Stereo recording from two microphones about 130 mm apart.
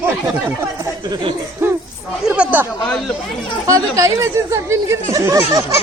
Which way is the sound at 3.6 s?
25° right (ahead or behind).